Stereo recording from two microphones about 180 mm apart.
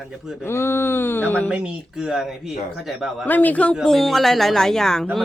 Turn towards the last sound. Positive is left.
turn(degrees=5)  # may be behind; listen again after turning